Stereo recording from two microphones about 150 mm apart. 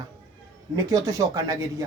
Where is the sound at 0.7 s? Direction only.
20° right (ahead or behind).